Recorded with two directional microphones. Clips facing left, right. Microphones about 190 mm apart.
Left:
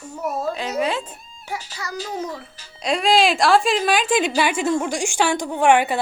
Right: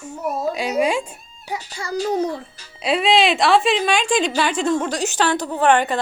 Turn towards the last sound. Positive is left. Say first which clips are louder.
# even
turn(degrees=10)  # may be behind; listen again after turning